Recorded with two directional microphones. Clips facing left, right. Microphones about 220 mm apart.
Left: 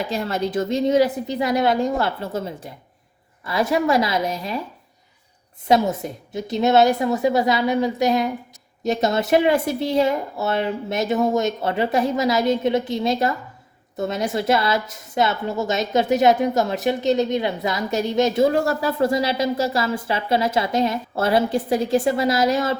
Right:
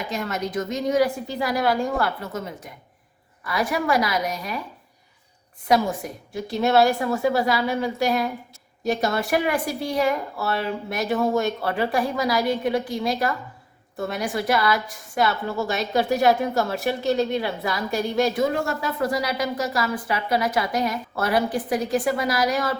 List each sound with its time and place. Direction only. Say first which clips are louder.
0.1 s speech: left 4 dB; 30° left (ahead or behind)
5.6 s speech: left 3 dB; 25° left (ahead or behind)
18.4 s speech: left 5 dB; 35° left (ahead or behind)